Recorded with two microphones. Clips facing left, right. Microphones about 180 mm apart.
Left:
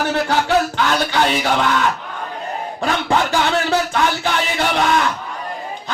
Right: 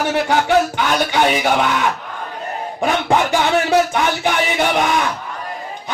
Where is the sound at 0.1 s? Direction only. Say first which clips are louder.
Right 3 dB; 15° right (ahead or behind).